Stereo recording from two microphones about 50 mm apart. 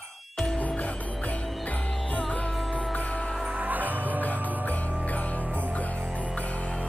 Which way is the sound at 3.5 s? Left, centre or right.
Right.